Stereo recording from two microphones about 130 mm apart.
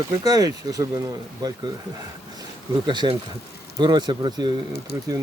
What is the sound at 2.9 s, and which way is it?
A man's voice, 40° right (ahead or behind).